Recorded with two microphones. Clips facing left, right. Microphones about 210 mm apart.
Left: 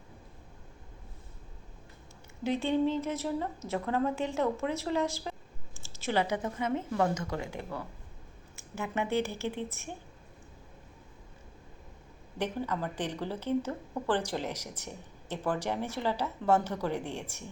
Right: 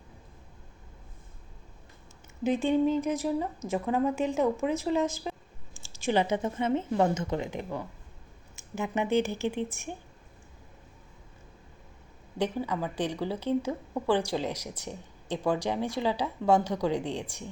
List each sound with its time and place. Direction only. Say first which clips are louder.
2.4 s a woman's voice: right 3 dB; 15° right (ahead or behind)
12.4 s a woman's voice: right 3 dB; 10° right (ahead or behind)